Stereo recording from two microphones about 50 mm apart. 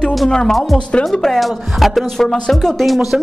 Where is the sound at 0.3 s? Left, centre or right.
Centre.